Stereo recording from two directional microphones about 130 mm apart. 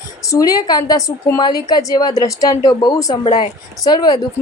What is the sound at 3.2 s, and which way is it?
Speech, 40° left (ahead or behind).